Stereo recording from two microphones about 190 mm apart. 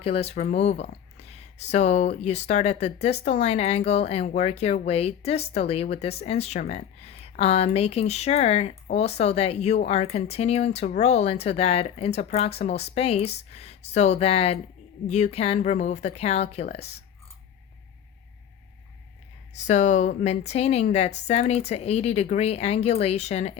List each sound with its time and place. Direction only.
0.0 s speech: 30° left (ahead or behind)
19.6 s speech: 40° left (ahead or behind)